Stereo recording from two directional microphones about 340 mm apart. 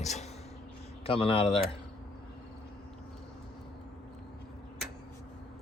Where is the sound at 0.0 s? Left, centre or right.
Centre.